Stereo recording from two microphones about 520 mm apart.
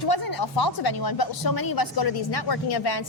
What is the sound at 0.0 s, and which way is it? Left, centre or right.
A woman's voice, left.